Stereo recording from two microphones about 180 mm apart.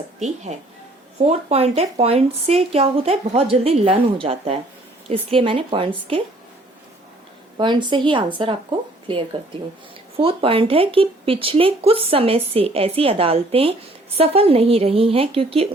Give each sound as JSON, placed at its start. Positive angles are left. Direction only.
{"t": 1.3, "sound": "a woman's voice", "side_deg": -35}
{"t": 7.5, "sound": "a woman's voice", "side_deg": -25}
{"t": 10.2, "sound": "speech", "side_deg": -30}